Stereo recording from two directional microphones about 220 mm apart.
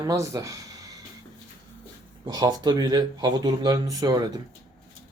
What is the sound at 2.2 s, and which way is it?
Speech, 20° right (ahead or behind).